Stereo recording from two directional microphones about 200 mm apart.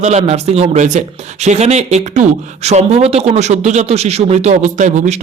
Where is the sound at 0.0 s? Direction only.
35° right (ahead or behind).